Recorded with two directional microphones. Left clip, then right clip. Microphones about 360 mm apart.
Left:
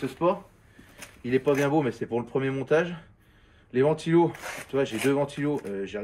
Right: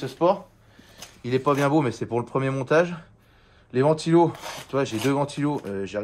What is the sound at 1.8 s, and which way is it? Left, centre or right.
Speech, right.